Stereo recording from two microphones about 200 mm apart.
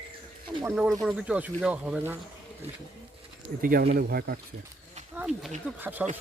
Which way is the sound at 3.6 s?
45° right (ahead or behind).